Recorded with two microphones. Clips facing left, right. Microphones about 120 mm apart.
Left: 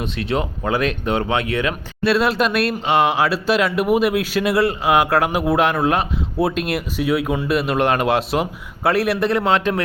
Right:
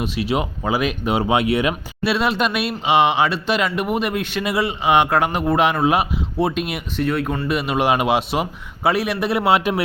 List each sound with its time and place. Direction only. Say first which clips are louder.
0.0 s speech: right 1 dB; 5° right (ahead or behind)
2.1 s speech: left 2 dB; centre (ahead or behind)